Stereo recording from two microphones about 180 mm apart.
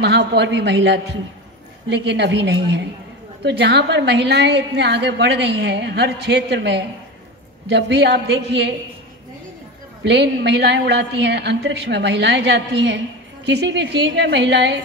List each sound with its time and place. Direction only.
0.0 s a woman's voice: 75° right (ahead or behind)
10.0 s a woman's voice: 70° right (ahead or behind)